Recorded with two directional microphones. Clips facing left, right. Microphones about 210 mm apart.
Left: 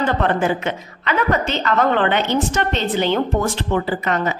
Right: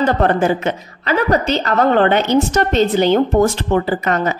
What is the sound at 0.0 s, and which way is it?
A woman's voice, 40° right (ahead or behind).